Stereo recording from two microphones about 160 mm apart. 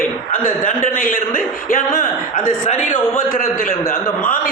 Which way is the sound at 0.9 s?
60° left (ahead or behind).